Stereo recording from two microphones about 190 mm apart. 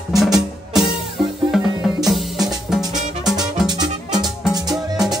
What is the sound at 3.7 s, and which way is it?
Music, 20° right (ahead or behind).